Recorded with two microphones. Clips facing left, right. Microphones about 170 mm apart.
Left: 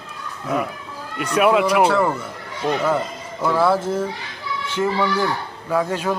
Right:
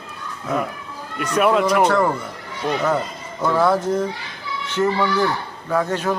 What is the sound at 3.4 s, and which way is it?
Speech, 5° left (ahead or behind).